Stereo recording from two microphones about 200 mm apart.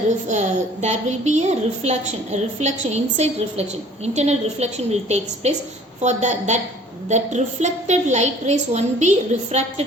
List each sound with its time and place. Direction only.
0.3 s a woman's voice: 35° right (ahead or behind)